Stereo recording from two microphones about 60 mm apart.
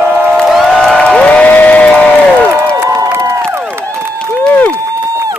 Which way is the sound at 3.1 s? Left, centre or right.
Right.